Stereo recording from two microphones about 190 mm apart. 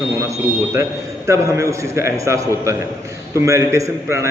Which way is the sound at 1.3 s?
15° right (ahead or behind).